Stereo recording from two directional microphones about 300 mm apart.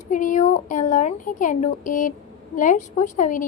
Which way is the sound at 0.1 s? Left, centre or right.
Left.